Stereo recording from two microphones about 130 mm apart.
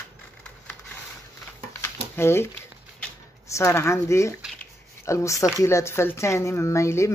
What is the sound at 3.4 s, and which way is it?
Speech, 20° left (ahead or behind).